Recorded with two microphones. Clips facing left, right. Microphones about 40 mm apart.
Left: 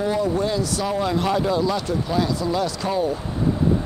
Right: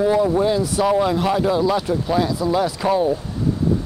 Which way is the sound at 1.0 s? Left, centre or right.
Centre.